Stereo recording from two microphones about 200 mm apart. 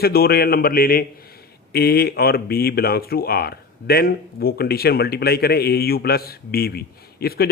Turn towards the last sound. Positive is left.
turn(degrees=50)  # may be behind; listen again after turning